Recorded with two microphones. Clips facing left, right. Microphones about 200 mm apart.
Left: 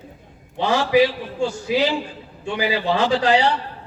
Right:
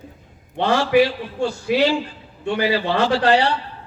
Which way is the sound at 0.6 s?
60° right (ahead or behind).